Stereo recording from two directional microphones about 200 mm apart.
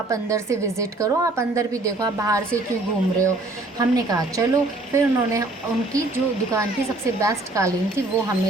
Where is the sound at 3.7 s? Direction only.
20° right (ahead or behind).